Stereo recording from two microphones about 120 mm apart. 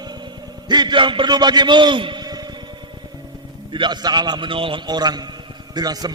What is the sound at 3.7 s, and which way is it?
A man's voice, 40° right (ahead or behind).